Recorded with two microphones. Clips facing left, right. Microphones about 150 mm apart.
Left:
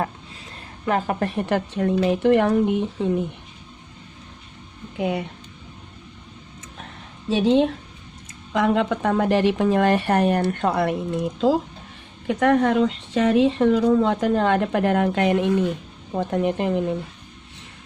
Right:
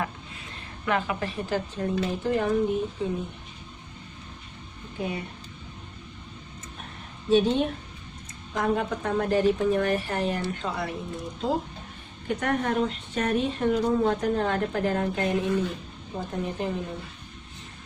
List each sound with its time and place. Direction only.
0.9 s a woman's voice: 45° left (ahead or behind)
1.4 s speech: 65° left (ahead or behind)
4.9 s speech: 90° left
7.3 s a woman's voice: 90° left; by 16.8 s 70° left (ahead or behind)